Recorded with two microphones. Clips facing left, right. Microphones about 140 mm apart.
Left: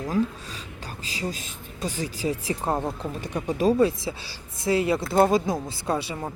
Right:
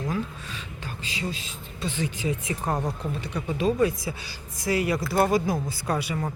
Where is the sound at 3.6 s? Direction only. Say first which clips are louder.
Left 3 dB; 30° left (ahead or behind).